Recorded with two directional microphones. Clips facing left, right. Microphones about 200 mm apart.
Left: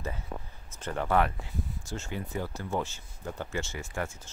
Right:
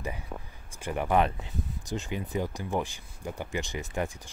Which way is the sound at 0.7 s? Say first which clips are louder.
Right 1 dB; 10° right (ahead or behind).